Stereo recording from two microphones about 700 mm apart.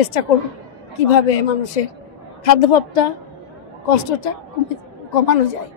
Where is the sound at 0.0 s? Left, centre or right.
Left.